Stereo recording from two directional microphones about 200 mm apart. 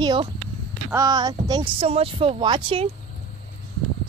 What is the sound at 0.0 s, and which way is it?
Speech, 20° right (ahead or behind).